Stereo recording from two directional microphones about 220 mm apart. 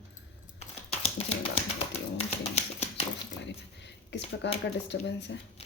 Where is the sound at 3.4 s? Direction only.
55° left (ahead or behind).